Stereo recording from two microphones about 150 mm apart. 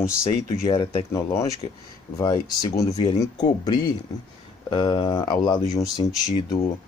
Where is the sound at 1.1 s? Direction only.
15° left (ahead or behind).